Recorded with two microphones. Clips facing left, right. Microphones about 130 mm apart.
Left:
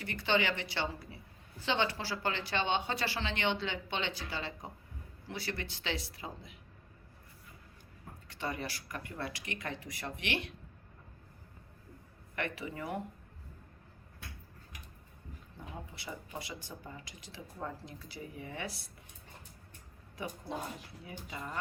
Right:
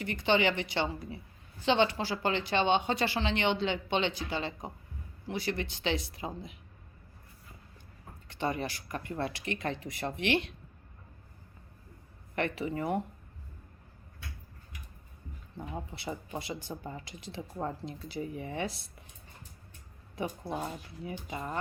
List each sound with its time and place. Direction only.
0.0 s speech: 20° right (ahead or behind)
8.3 s speech: 25° right (ahead or behind)
12.4 s speech: 30° right (ahead or behind)
16.0 s speech: 25° right (ahead or behind)
20.2 s speech: 25° right (ahead or behind)